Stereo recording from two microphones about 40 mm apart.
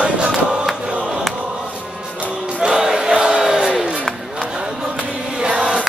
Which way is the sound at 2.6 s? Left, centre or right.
Right.